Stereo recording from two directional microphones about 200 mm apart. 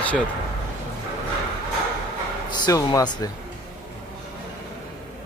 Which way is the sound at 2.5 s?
20° left (ahead or behind).